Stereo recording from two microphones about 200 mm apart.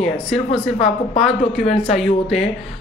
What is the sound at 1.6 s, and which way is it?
Speech, 30° left (ahead or behind).